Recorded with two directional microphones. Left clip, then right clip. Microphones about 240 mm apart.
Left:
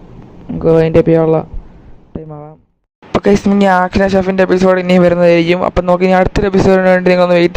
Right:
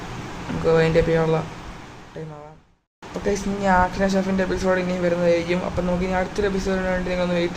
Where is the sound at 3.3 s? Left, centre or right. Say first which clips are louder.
Left 10 dB; left.